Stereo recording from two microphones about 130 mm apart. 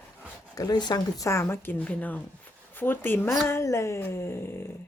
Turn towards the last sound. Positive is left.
turn(degrees=20)  # may be behind; listen again after turning